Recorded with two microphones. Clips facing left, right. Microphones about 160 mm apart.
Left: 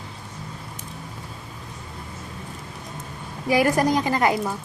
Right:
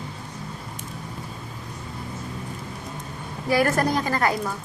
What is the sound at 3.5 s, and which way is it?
Speech, 15° left (ahead or behind).